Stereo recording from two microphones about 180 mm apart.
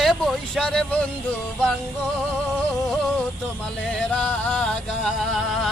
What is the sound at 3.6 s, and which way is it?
Music, 5° left (ahead or behind).